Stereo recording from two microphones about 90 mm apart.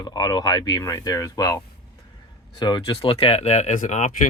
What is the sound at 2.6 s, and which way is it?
Speech, 65° left (ahead or behind).